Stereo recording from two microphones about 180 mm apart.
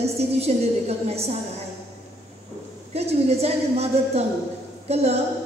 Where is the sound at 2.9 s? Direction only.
35° right (ahead or behind).